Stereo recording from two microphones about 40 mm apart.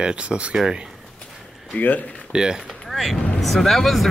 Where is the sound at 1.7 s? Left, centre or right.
Left.